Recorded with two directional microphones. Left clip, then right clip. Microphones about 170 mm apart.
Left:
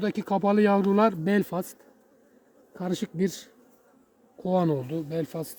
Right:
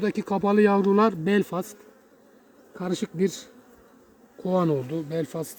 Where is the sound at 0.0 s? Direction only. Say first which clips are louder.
Right 1 dB; 20° left (ahead or behind).